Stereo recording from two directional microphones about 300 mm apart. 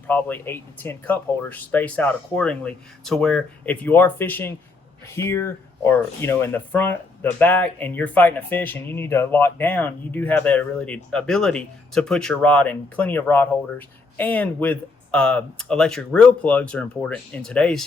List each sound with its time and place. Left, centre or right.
0.1 s speech: centre